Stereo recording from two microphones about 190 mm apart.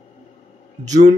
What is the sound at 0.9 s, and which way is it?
Speech, 35° right (ahead or behind).